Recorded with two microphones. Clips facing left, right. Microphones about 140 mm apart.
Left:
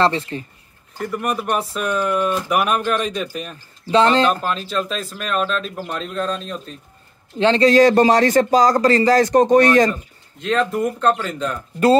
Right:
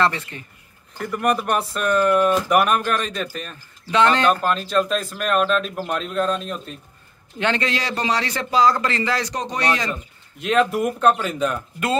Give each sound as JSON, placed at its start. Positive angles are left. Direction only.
{"t": 0.0, "sound": "speech", "side_deg": 30}
{"t": 0.9, "sound": "speech", "side_deg": 0}
{"t": 3.9, "sound": "speech", "side_deg": 30}
{"t": 4.3, "sound": "speech", "side_deg": 0}
{"t": 7.3, "sound": "speech", "side_deg": 30}
{"t": 7.7, "sound": "speech", "side_deg": 45}
{"t": 10.4, "sound": "speech", "side_deg": -10}